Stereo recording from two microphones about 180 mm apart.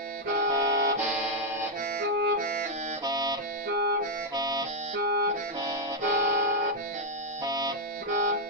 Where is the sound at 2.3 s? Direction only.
50° right (ahead or behind).